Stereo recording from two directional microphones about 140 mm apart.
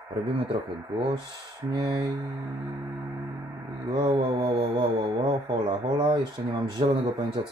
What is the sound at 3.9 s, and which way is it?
Speech, 35° right (ahead or behind).